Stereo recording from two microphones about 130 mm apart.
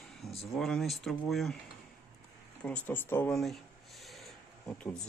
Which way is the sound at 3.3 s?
Centre (ahead or behind).